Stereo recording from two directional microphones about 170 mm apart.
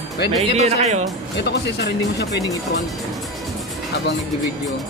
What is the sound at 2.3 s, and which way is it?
Speech, 20° left (ahead or behind).